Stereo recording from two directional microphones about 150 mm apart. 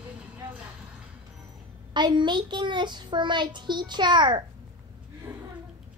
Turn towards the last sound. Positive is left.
turn(degrees=-10)  # may be behind; listen again after turning